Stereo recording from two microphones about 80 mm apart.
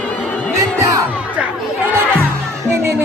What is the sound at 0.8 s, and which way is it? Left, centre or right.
Crowd, right.